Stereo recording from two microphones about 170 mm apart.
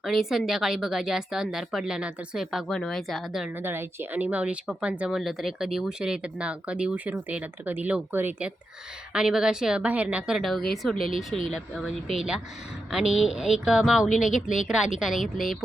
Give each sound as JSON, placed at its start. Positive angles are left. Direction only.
{"t": 0.0, "sound": "a woman's voice", "side_deg": 0}
{"t": 3.6, "sound": "a woman's voice", "side_deg": -10}
{"t": 14.1, "sound": "speech", "side_deg": 45}
{"t": 14.7, "sound": "a woman's voice", "side_deg": -5}